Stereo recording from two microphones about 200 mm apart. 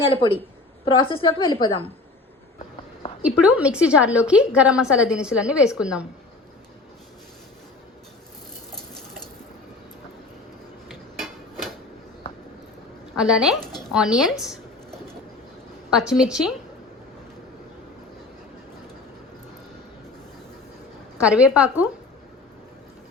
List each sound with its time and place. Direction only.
0.0 s a woman's voice: 25° left (ahead or behind)
3.2 s a woman's voice: 5° right (ahead or behind)
10.8 s tick-tock: centre (ahead or behind)
13.1 s a woman's voice: 5° right (ahead or behind)
15.9 s a woman's voice: 5° right (ahead or behind)
21.2 s a woman's voice: 5° right (ahead or behind)